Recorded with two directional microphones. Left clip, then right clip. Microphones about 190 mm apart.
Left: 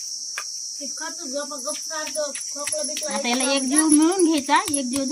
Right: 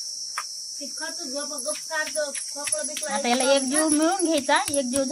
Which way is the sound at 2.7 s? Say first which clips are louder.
Left 3 dB; 5° left (ahead or behind).